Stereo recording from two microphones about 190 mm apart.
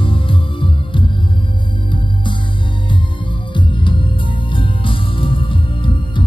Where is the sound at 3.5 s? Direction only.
25° left (ahead or behind).